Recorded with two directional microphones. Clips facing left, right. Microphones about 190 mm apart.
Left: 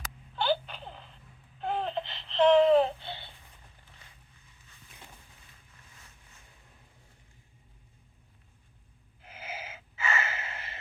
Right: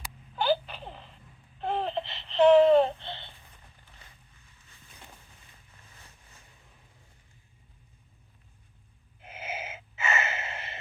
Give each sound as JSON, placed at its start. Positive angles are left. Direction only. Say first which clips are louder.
{"t": 0.3, "sound": "a sound", "louder": "right 2 dB", "side_deg": -5}
{"t": 1.5, "sound": "babbling", "louder": "right 2 dB", "side_deg": 0}
{"t": 9.2, "sound": "gasp", "louder": "right 4 dB", "side_deg": -20}